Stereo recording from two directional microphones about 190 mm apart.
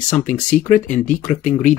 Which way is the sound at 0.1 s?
40° left (ahead or behind).